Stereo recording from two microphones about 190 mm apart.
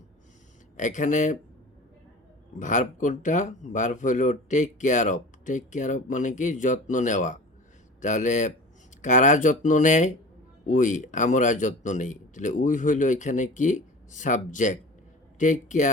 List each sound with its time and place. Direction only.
0.8 s speech: 40° left (ahead or behind)
2.6 s speech: 40° left (ahead or behind)